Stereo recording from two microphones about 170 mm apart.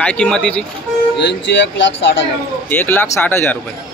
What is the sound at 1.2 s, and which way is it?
Speech, 90° left.